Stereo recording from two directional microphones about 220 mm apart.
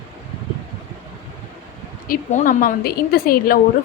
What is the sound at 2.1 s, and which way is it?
A woman's voice, 35° left (ahead or behind).